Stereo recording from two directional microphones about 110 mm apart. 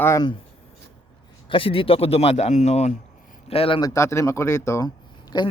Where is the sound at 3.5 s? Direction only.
60° left (ahead or behind).